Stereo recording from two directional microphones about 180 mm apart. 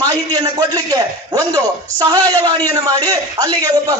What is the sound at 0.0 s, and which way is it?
A man's voice, 20° right (ahead or behind).